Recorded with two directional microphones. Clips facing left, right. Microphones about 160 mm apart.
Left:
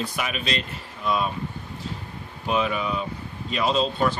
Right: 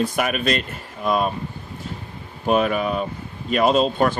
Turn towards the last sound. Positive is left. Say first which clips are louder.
# right 5 dB
turn(degrees=-50)  # may be behind; listen again after turning